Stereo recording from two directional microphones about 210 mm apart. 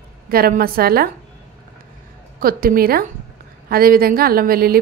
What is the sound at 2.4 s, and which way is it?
A woman's voice, 45° right (ahead or behind).